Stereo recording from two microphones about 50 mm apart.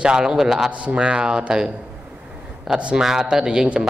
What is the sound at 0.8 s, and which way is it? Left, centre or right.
A man's voice, right.